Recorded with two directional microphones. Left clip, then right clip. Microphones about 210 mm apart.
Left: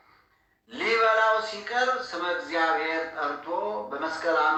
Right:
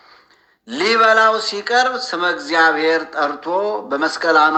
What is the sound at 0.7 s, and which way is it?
Speech, 50° right (ahead or behind).